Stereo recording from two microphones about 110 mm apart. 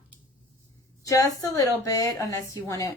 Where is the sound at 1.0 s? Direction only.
30° left (ahead or behind).